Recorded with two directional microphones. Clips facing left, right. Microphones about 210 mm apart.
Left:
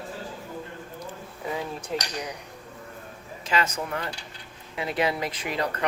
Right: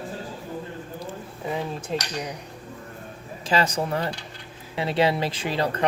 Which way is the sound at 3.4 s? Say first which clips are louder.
Right 4 dB; 35° right (ahead or behind).